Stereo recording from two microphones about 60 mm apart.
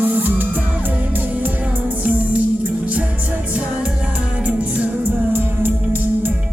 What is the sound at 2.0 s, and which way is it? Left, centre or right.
Music, right.